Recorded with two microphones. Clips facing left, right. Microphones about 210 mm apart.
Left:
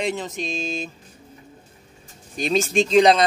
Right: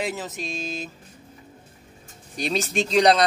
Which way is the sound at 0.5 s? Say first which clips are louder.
Left 4 dB; 25° left (ahead or behind).